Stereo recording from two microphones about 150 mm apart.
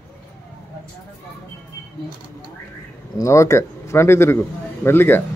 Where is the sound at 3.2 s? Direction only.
20° left (ahead or behind).